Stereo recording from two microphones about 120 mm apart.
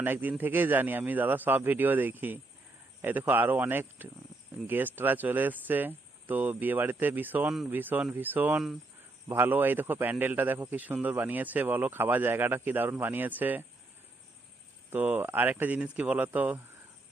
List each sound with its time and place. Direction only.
0.0 s a man's voice: 15° right (ahead or behind)
14.8 s a man's voice: 15° right (ahead or behind)